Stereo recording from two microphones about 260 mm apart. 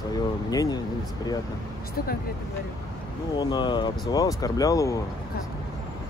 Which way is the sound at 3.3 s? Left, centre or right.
Centre.